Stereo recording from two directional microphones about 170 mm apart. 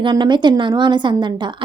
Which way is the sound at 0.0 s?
25° right (ahead or behind).